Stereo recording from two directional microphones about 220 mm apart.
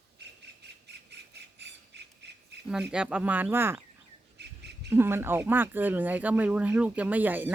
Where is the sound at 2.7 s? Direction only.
5° right (ahead or behind).